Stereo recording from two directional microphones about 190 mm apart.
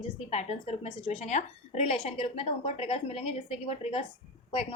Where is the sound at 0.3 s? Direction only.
35° left (ahead or behind).